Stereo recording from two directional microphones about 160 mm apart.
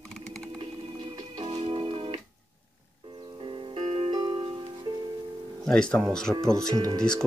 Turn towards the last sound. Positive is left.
turn(degrees=-20)  # may be behind; listen again after turning